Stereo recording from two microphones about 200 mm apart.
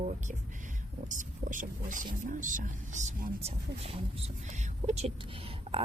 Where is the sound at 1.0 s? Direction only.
40° right (ahead or behind).